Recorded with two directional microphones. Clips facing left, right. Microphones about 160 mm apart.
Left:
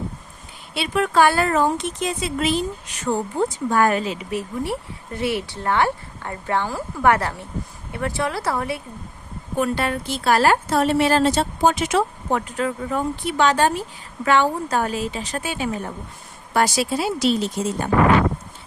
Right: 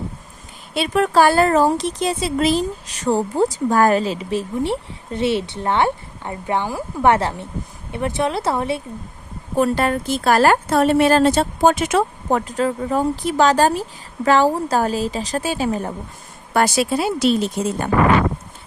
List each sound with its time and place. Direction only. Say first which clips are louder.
0.7 s speech: right 4 dB; 40° right (ahead or behind); by 8.8 s 25° right (ahead or behind)
9.6 s a woman's voice: right 4 dB; 40° right (ahead or behind)
12.5 s speech: right 4 dB; 35° right (ahead or behind)
16.6 s speech: right 3 dB; 55° right (ahead or behind)